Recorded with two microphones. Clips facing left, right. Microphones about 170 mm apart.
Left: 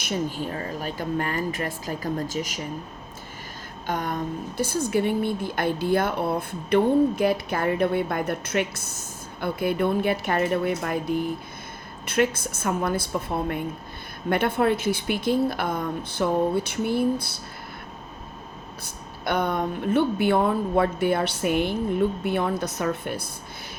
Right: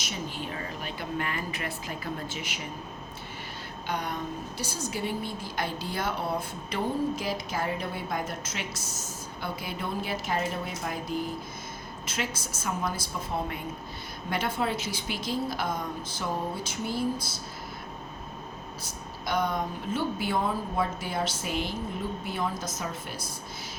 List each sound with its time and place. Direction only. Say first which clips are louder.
0.0 s speech: left 8 dB; 50° left (ahead or behind)
3.8 s a woman's voice: left 5 dB; 45° left (ahead or behind)
18.8 s a woman's voice: left 2 dB; 60° left (ahead or behind)